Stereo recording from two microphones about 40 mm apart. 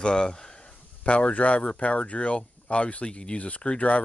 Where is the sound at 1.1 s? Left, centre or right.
Left.